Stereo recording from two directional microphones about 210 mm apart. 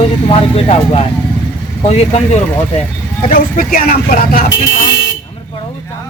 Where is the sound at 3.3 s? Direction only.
45° left (ahead or behind).